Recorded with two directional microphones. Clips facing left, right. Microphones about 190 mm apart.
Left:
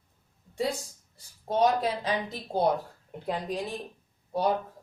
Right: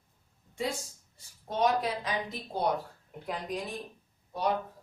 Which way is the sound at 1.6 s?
30° left (ahead or behind).